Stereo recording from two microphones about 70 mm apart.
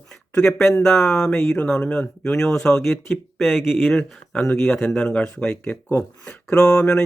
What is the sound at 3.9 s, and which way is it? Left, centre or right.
Speech, centre.